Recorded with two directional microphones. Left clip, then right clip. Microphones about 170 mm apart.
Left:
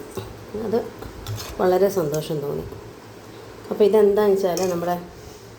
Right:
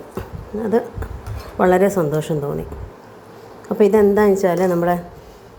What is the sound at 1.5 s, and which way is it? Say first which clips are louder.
Speech: right 4 dB; 40° right (ahead or behind).